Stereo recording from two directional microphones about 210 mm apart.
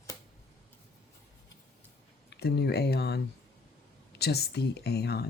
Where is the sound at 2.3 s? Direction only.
50° left (ahead or behind).